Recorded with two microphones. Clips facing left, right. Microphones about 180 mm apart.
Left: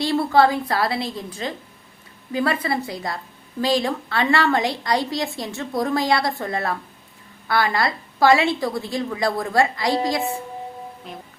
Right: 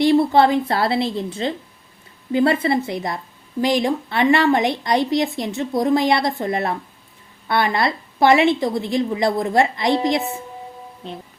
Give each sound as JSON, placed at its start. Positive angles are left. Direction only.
{"t": 0.0, "sound": "a woman's voice", "side_deg": -20}